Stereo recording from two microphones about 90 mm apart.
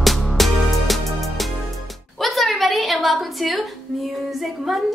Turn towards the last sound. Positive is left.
turn(degrees=0)  # may be behind; listen again after turning